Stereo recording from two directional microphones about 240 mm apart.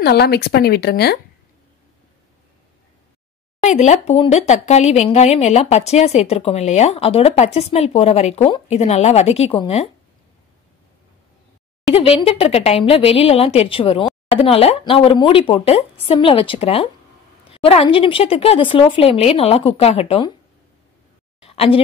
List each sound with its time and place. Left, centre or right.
0.0 s speech: left
3.6 s speech: left
11.9 s speech: left
21.4 s a sound: left